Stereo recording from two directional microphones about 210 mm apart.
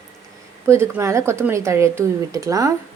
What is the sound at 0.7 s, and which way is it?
Speech, 15° right (ahead or behind).